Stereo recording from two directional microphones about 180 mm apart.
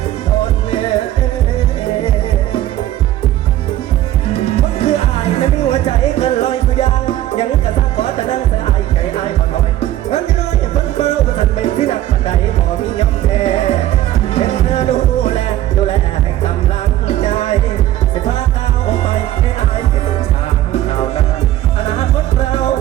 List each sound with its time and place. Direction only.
4.5 s music: 35° left (ahead or behind)
7.9 s music: 35° left (ahead or behind)
10.9 s music: 40° left (ahead or behind)
13.0 s music: 35° left (ahead or behind)
17.1 s music: 35° left (ahead or behind)
18.9 s music: 35° left (ahead or behind)